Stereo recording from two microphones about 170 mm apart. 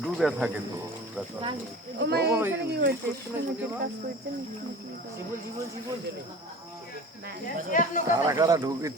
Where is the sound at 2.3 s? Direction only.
15° right (ahead or behind).